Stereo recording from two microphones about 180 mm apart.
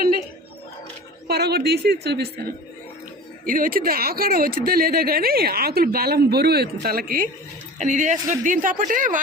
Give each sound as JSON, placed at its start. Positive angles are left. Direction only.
{"t": 1.3, "sound": "speech", "side_deg": -65}
{"t": 3.4, "sound": "a woman's voice", "side_deg": -50}